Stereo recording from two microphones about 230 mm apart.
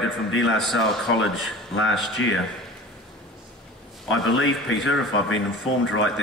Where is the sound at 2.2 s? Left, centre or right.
Left.